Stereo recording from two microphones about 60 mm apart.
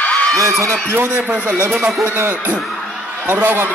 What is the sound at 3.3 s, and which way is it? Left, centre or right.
Speech, right.